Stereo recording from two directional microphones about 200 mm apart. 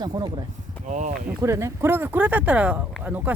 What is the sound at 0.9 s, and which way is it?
Speech, 40° right (ahead or behind).